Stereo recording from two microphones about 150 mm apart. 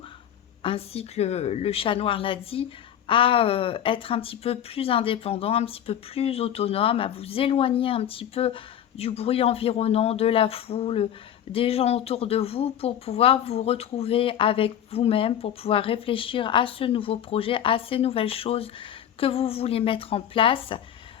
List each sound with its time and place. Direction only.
0.6 s speech: 40° left (ahead or behind)